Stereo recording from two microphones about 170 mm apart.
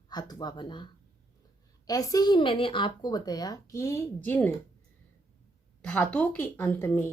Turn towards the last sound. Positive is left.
turn(degrees=15)  # may be behind; listen again after turning